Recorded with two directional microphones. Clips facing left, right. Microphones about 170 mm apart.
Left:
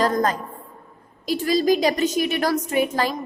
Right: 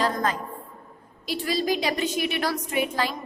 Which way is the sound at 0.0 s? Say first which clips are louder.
Left 5 dB; 40° left (ahead or behind).